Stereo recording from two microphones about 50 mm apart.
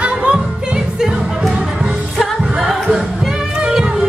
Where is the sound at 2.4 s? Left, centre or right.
Centre.